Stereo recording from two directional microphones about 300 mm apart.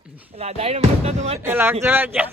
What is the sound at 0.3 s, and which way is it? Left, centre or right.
Speech, centre.